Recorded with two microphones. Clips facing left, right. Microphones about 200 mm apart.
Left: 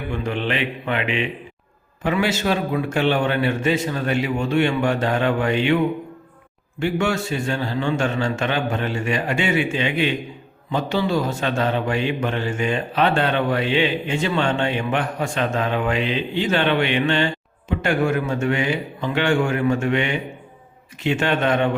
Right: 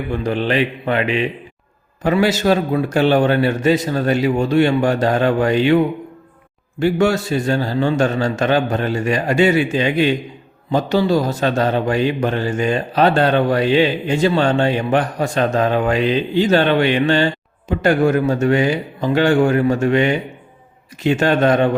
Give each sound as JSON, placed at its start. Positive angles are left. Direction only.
{"t": 0.1, "sound": "a man's voice", "side_deg": -35}